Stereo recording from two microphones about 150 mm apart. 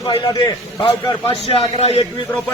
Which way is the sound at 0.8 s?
35° left (ahead or behind).